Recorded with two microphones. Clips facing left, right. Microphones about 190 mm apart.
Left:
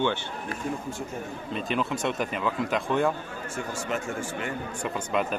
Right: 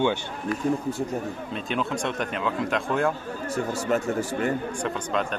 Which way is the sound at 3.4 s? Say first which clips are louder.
Right 7 dB; 35° right (ahead or behind).